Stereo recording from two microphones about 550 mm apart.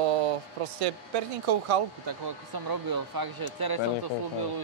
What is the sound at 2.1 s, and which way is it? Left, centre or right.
Speech, right.